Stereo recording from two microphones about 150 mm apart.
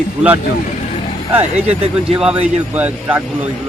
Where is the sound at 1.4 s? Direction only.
40° right (ahead or behind).